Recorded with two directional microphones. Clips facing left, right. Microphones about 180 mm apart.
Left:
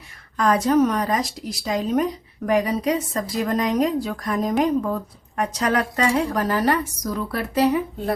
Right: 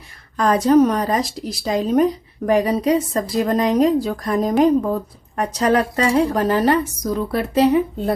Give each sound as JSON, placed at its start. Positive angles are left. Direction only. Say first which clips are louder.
{"t": 0.3, "sound": "a woman's voice", "louder": "right 4 dB", "side_deg": -35}